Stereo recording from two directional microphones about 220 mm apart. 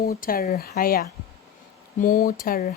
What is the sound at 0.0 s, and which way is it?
Speech, 40° left (ahead or behind).